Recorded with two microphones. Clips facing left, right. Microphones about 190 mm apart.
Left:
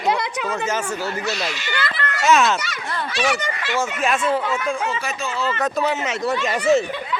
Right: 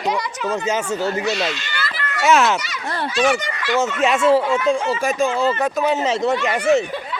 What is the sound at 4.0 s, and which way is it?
Speech, 25° right (ahead or behind).